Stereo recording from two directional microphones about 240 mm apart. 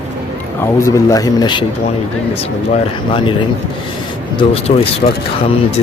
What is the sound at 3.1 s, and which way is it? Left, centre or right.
Speech, centre.